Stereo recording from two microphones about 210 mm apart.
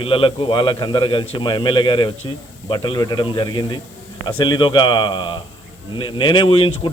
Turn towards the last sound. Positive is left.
turn(degrees=25)  # may be behind; listen again after turning